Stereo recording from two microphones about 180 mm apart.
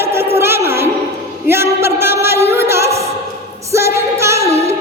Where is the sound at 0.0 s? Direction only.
15° right (ahead or behind).